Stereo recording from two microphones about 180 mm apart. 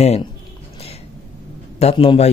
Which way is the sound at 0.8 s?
35° left (ahead or behind).